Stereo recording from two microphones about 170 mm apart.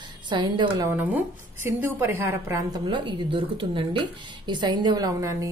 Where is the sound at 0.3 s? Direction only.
25° right (ahead or behind).